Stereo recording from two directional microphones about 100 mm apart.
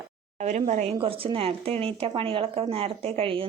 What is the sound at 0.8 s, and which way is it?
A woman's voice, 75° right (ahead or behind).